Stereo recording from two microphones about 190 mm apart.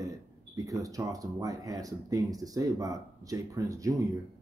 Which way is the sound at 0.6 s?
15° right (ahead or behind).